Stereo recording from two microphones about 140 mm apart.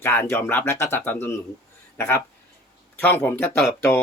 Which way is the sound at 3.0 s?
15° left (ahead or behind).